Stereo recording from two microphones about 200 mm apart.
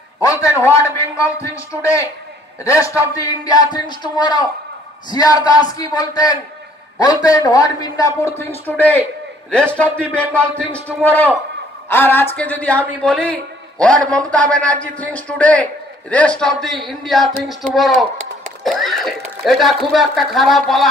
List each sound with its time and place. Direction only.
0.2 s a man's voice: 15° left (ahead or behind)
11.0 s a man's voice: 10° left (ahead or behind)